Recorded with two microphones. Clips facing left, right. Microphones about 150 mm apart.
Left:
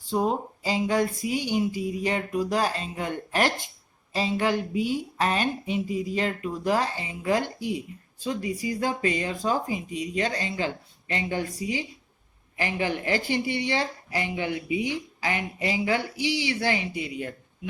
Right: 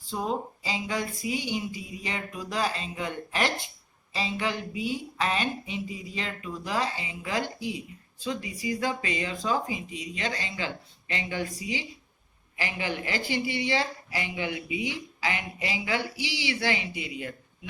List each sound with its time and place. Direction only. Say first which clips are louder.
0.1 s speech: left 5 dB; 40° left (ahead or behind)